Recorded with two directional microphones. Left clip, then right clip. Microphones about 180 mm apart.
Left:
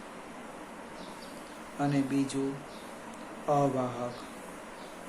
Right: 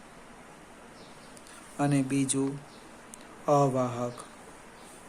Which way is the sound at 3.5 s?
60° right (ahead or behind).